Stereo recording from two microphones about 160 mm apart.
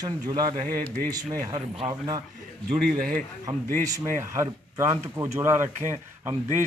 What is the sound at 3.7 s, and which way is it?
Speech, 55° right (ahead or behind).